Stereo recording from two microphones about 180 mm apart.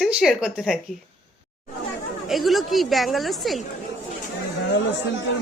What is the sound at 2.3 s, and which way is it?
Speech, centre (ahead or behind).